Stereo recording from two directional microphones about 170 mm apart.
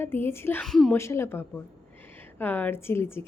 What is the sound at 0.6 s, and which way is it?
Speech, centre (ahead or behind).